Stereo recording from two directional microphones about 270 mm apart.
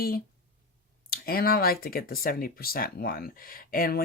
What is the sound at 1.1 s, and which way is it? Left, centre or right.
Speech, left.